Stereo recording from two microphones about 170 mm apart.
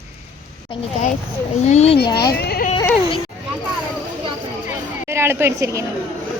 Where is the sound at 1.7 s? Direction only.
40° left (ahead or behind).